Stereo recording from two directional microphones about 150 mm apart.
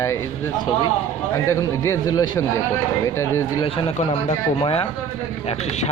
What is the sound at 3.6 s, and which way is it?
Speech, 40° left (ahead or behind).